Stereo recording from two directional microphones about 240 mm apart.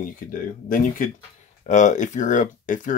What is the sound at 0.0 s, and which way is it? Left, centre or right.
Speech, left.